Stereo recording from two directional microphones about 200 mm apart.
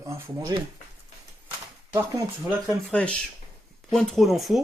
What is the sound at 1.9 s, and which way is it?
Speech, 10° right (ahead or behind).